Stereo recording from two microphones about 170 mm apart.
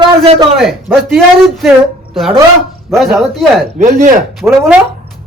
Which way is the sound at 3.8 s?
40° right (ahead or behind).